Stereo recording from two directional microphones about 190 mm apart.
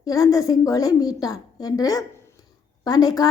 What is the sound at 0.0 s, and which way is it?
A woman's voice, 20° left (ahead or behind).